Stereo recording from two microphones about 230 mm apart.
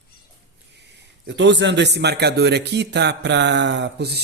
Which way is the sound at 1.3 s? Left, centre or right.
Right.